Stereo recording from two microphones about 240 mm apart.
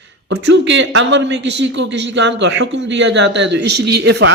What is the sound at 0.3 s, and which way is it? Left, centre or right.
Speech, right.